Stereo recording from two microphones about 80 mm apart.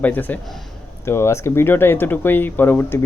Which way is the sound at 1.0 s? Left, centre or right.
Left.